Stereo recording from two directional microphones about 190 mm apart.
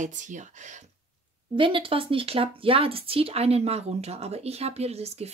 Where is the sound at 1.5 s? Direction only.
25° right (ahead or behind).